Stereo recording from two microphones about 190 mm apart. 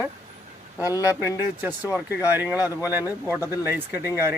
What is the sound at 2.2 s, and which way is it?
Speech, 10° right (ahead or behind).